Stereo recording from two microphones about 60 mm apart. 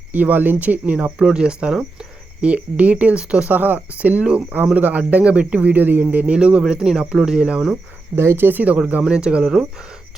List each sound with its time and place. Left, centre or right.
0.1 s speech: right
1.2 s speech: centre
3.5 s speech: right
4.8 s speech: right
6.3 s speech: centre
8.1 s speech: right; by 9.6 s centre